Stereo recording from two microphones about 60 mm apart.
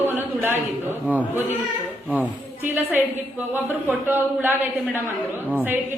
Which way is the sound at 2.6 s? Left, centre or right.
Right.